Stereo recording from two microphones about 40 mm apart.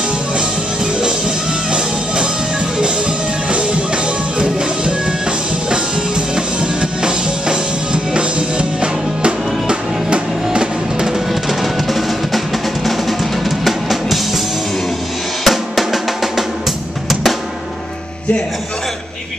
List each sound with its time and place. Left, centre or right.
2.8 s music: right
11.4 s music: centre
12.8 s drum kit: centre
15.4 s drum: centre